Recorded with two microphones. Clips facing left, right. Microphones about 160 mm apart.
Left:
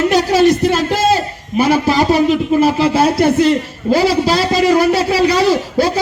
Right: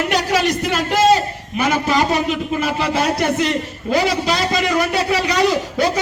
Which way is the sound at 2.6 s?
35° left (ahead or behind).